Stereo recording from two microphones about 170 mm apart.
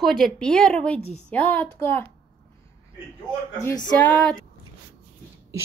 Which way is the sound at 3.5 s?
20° left (ahead or behind).